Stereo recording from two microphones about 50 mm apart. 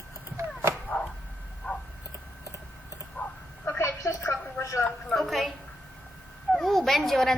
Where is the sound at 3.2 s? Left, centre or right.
Left.